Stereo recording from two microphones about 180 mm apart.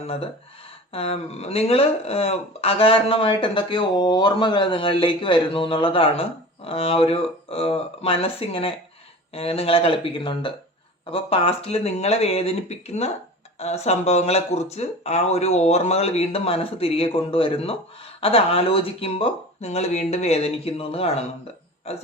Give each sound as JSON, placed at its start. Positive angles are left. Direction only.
{"t": 0.0, "sound": "speech", "side_deg": 35}